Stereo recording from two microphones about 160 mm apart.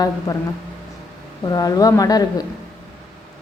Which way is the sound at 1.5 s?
20° left (ahead or behind).